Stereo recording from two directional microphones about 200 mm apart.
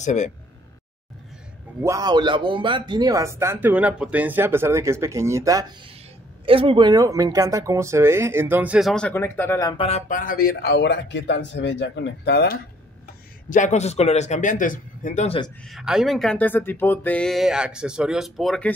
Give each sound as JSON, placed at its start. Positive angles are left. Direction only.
{"t": 0.0, "sound": "speech", "side_deg": 35}
{"t": 1.8, "sound": "speech", "side_deg": -15}
{"t": 6.4, "sound": "speech", "side_deg": -25}
{"t": 9.8, "sound": "speech", "side_deg": 30}
{"t": 13.5, "sound": "speech", "side_deg": 35}
{"t": 15.7, "sound": "speech", "side_deg": -5}